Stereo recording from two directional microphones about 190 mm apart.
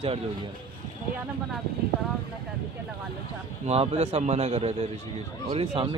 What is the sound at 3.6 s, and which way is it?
Speech, 35° right (ahead or behind).